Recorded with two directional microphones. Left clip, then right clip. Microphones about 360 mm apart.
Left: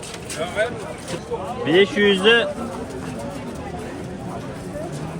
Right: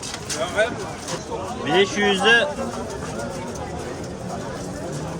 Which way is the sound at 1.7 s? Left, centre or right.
Left.